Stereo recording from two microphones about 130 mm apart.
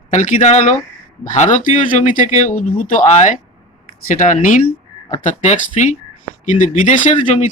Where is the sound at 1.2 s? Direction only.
75° left (ahead or behind).